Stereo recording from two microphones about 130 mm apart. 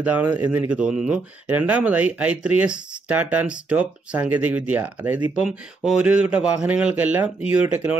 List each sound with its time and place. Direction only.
0.0 s speech: 10° right (ahead or behind)